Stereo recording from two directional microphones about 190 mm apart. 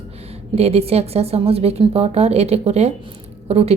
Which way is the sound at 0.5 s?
35° right (ahead or behind).